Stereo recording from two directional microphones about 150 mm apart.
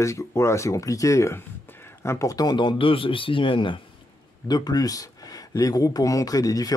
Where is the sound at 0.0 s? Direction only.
20° left (ahead or behind).